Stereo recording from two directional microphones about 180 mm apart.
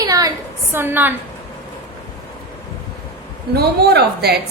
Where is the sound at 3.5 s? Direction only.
65° right (ahead or behind).